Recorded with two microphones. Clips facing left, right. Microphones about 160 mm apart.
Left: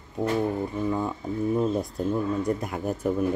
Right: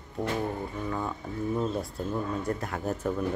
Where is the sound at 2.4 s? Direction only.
15° left (ahead or behind).